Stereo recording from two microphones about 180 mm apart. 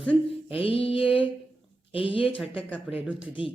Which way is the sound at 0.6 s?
30° left (ahead or behind).